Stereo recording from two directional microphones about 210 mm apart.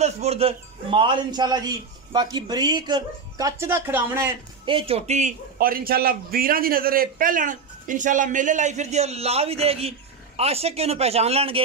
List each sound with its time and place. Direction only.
0.0 s a man's voice: 30° right (ahead or behind); by 4.3 s 10° right (ahead or behind)
4.6 s a man's voice: 25° right (ahead or behind)